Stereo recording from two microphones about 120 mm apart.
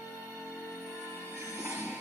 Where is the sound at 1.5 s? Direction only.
25° right (ahead or behind).